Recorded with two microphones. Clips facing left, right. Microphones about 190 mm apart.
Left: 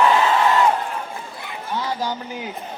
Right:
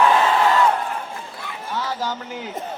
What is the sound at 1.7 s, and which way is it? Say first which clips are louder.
Speech: left 1 dB; 15° left (ahead or behind).